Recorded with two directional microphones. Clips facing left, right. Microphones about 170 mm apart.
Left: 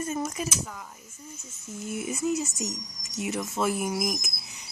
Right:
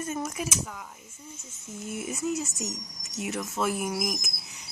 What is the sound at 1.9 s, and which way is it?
Speech, centre (ahead or behind).